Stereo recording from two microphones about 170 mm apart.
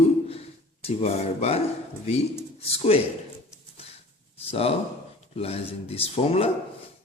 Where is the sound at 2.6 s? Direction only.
35° left (ahead or behind).